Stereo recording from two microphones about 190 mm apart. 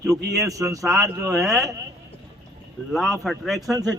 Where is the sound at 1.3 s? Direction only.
Centre (ahead or behind).